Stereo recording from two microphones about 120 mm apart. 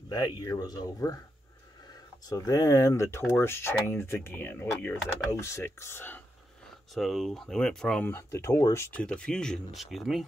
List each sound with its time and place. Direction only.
0.1 s speech: 30° left (ahead or behind)
6.9 s speech: centre (ahead or behind)
8.0 s speech: 20° left (ahead or behind)
8.9 s speech: 10° left (ahead or behind)